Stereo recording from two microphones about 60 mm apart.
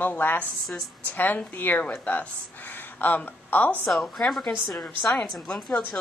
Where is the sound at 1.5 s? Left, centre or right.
Left.